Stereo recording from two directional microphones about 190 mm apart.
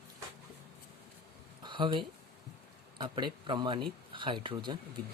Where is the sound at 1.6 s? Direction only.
25° right (ahead or behind).